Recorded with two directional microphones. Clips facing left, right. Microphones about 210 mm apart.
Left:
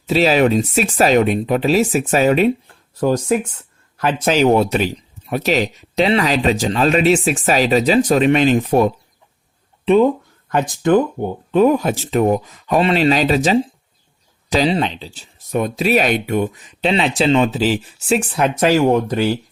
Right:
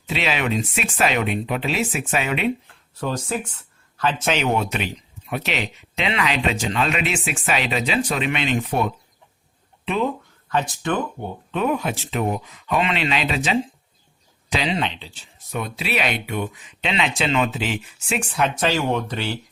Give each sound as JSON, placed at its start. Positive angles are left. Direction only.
{"t": 0.1, "sound": "speech", "side_deg": 40}
{"t": 4.2, "sound": "speech", "side_deg": 35}